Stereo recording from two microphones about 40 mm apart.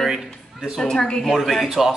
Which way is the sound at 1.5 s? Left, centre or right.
Centre.